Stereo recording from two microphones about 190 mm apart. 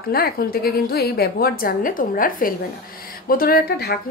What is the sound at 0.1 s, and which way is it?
A woman's voice, 50° left (ahead or behind).